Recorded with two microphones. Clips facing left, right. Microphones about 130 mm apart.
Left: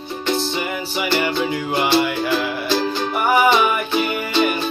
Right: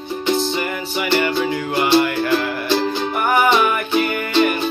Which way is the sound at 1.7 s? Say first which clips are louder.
Right 2 dB; 10° left (ahead or behind).